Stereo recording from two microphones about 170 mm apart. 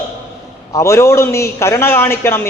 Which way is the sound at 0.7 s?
15° left (ahead or behind).